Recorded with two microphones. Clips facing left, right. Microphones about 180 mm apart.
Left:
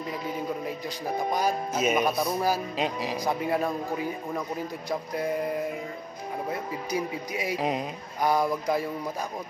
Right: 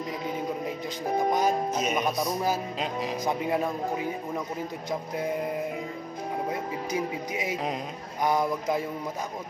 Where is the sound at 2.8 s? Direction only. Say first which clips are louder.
Left 1 dB; 5° left (ahead or behind).